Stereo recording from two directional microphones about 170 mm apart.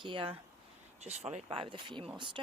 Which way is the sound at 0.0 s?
30° right (ahead or behind).